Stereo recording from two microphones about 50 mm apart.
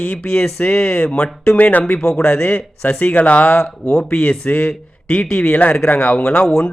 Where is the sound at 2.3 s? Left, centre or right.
Left.